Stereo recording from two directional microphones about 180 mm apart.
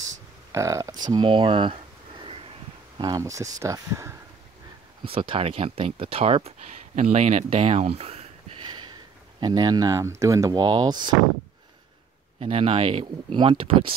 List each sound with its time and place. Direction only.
0.5 s speech: 15° right (ahead or behind)
1.1 s a sound: 30° right (ahead or behind)
3.0 s speech: 20° right (ahead or behind)
5.0 s speech: 30° right (ahead or behind)
12.4 s speech: 35° right (ahead or behind)